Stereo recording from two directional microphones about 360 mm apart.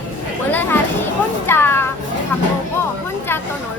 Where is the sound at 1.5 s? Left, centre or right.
Centre.